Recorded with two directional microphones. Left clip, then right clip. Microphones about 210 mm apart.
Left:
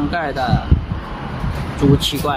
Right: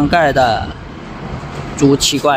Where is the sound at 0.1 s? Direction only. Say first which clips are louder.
Right 9 dB; 40° right (ahead or behind).